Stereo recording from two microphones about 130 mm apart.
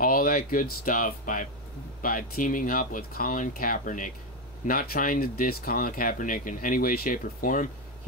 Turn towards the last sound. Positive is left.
turn(degrees=90)